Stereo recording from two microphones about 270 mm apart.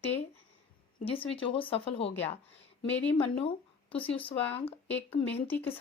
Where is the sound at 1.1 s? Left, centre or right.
Centre.